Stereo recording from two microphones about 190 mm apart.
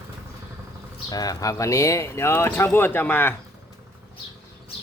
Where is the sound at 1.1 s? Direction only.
20° left (ahead or behind).